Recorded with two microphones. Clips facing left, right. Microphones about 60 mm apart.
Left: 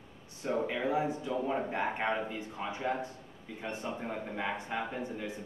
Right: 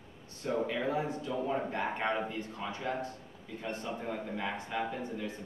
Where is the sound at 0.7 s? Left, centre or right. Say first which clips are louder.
Left 2 dB; centre.